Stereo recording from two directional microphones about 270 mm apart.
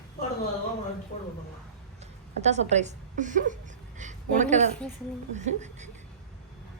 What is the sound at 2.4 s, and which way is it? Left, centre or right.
Speech, right.